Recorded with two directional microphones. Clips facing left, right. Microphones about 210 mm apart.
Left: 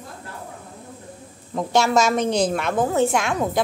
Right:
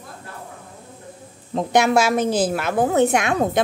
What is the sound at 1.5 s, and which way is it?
A woman's voice, 20° right (ahead or behind).